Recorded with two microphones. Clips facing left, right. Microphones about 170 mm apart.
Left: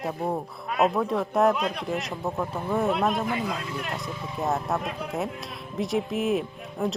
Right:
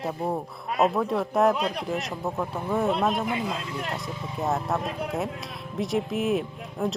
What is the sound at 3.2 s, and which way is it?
Speech, 25° right (ahead or behind).